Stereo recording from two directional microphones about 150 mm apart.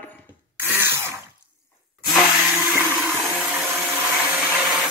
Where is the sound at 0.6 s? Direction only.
15° right (ahead or behind).